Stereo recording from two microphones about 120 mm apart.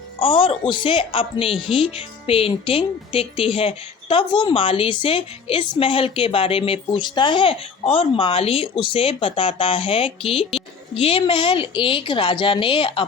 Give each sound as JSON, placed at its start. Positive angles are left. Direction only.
{"t": 0.2, "sound": "a woman's voice", "side_deg": 45}